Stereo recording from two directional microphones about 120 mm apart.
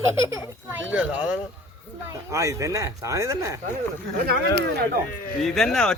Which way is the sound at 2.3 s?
25° right (ahead or behind).